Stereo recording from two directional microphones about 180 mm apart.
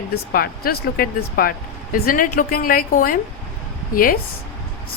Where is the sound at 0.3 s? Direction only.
55° left (ahead or behind).